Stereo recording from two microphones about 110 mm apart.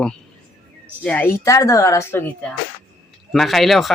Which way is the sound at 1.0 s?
15° left (ahead or behind).